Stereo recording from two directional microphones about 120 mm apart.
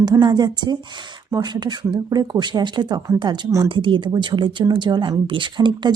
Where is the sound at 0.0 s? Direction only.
35° right (ahead or behind).